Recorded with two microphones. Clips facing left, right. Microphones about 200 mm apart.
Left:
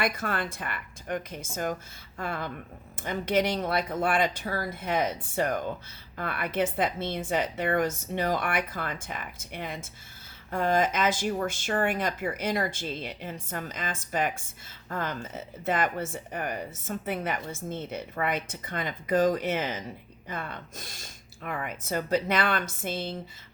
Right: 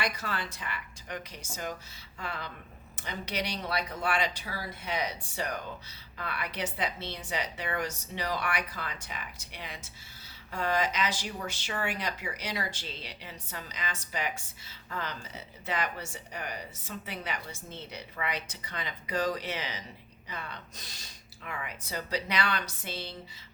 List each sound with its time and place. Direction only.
0.0 s speech: 50° left (ahead or behind)